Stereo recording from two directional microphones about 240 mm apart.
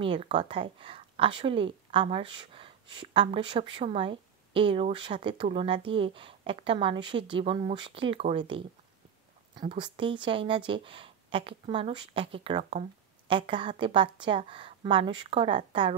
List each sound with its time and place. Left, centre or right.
0.0 s a woman's voice: right